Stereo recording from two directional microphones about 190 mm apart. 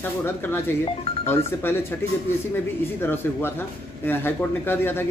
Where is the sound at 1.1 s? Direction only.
30° left (ahead or behind).